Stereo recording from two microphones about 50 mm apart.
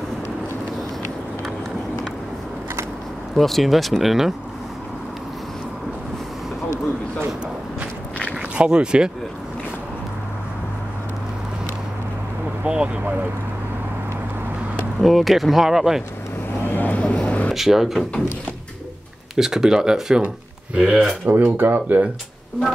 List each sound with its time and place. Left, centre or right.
3.3 s speech: centre
8.3 s a sound: right
12.6 s speech: right
15.0 s speech: centre
16.6 s vehicle: left
17.0 s vehicle: left
17.6 s speech: centre
19.3 s speech: centre
21.3 s speech: right